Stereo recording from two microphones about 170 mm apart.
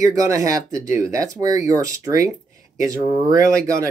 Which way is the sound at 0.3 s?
20° right (ahead or behind).